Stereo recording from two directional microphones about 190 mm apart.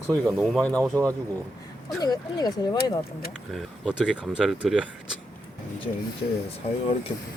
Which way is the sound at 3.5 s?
Centre (ahead or behind).